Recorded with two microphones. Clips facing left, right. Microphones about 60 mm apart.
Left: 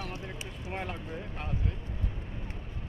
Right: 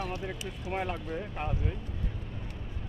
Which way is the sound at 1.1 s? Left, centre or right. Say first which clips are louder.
Right 4 dB; centre.